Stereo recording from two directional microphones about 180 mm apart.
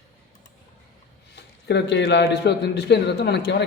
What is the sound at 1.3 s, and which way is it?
A man's voice, 70° left (ahead or behind).